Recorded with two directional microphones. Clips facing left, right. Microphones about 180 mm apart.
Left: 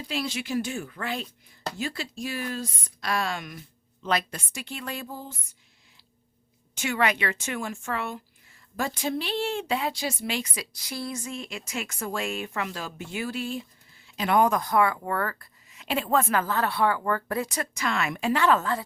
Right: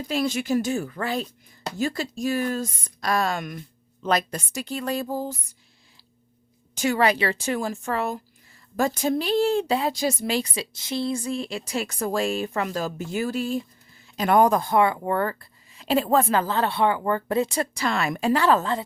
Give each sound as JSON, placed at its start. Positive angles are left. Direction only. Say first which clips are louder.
{"t": 0.1, "sound": "speech", "louder": "right 6 dB", "side_deg": -45}
{"t": 6.7, "sound": "speech", "louder": "right 5 dB", "side_deg": -35}